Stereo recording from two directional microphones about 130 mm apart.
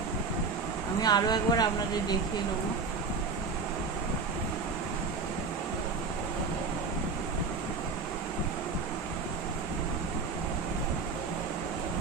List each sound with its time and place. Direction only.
1.0 s speech: 30° left (ahead or behind)